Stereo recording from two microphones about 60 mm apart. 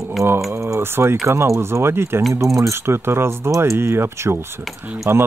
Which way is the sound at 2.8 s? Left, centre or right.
Right.